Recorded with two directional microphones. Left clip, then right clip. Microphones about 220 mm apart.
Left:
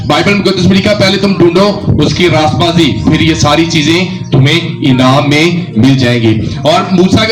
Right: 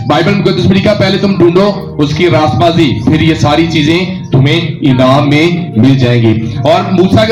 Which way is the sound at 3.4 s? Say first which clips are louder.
Left 1 dB; 55° left (ahead or behind).